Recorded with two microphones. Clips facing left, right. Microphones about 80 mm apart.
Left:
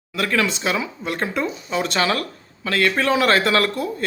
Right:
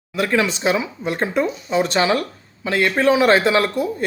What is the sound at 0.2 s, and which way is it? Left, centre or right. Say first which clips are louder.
A man's voice: right 2 dB; right.